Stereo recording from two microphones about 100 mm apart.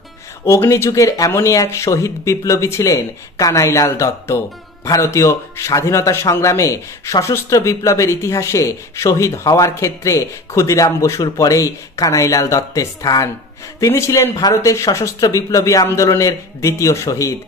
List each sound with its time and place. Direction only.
0.5 s a man's voice: 25° left (ahead or behind)